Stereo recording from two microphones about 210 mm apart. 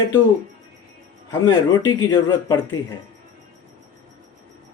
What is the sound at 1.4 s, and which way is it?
Speech, 20° left (ahead or behind).